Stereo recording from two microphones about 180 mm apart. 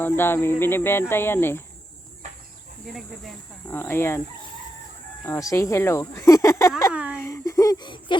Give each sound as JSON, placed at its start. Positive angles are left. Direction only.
{"t": 0.0, "sound": "speech", "side_deg": 10}
{"t": 3.7, "sound": "speech", "side_deg": 10}
{"t": 5.2, "sound": "speech", "side_deg": 15}
{"t": 6.9, "sound": "speech", "side_deg": -10}
{"t": 7.2, "sound": "speech", "side_deg": 20}